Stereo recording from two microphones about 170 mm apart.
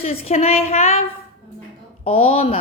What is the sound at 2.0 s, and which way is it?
Speech, 35° left (ahead or behind).